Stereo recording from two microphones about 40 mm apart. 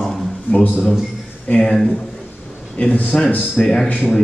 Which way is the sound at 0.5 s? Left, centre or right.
Left.